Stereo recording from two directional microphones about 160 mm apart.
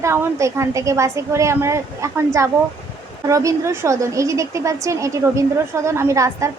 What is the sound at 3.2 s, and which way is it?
A woman's voice, 20° right (ahead or behind).